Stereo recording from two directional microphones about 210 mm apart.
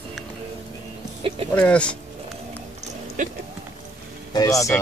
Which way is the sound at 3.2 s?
40° right (ahead or behind).